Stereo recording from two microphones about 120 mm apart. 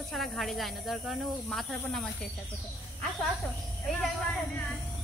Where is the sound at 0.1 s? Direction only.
Centre (ahead or behind).